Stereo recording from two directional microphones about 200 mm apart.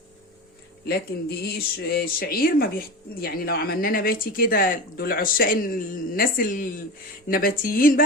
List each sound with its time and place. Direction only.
1.4 s speech: 50° left (ahead or behind)